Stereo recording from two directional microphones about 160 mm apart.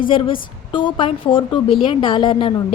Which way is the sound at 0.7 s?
30° left (ahead or behind).